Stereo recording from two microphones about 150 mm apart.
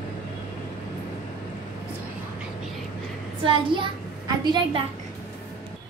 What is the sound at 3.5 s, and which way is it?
A child's voice, 35° right (ahead or behind).